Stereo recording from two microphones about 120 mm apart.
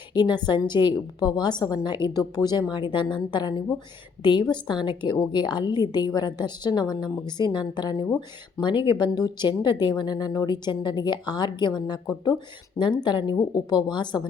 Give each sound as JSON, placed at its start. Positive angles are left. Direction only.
{"t": 0.1, "sound": "speech", "side_deg": 35}